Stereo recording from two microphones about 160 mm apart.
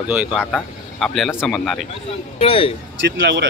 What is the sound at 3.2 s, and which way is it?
Speech, 90° right.